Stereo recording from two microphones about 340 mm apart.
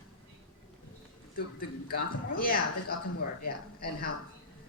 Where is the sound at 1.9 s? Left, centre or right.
Left.